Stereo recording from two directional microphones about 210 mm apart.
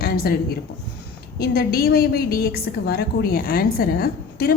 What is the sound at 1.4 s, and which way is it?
A woman's voice, 50° left (ahead or behind).